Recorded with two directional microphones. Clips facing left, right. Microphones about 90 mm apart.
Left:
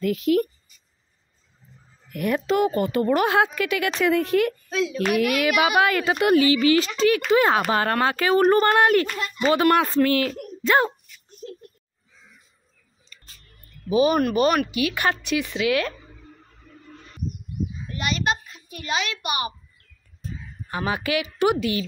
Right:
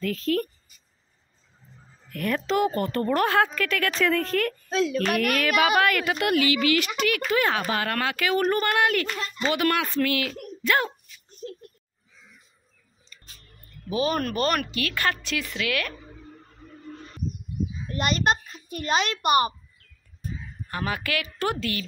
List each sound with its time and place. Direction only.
0.0 s a woman's voice: 15° left (ahead or behind)
2.1 s a woman's voice: 10° left (ahead or behind); by 10.9 s 30° left (ahead or behind)
13.8 s a woman's voice: 15° left (ahead or behind)
17.9 s a child's voice: 45° right (ahead or behind)
20.7 s speech: 20° left (ahead or behind)